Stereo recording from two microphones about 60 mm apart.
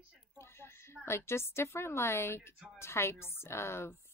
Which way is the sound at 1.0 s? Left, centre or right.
Left.